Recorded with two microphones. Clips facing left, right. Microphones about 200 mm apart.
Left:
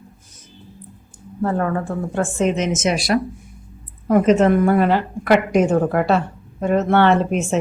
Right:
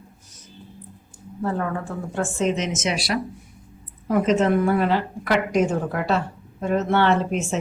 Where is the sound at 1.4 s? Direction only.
55° left (ahead or behind).